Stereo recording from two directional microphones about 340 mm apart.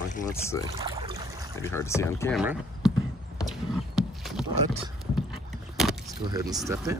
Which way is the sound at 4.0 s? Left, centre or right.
Centre.